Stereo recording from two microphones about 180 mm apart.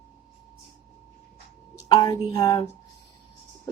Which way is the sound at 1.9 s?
20° left (ahead or behind).